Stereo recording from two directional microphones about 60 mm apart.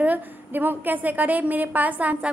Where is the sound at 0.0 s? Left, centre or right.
Right.